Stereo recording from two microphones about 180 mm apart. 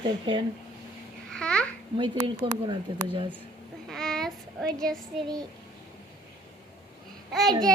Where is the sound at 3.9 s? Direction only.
Centre (ahead or behind).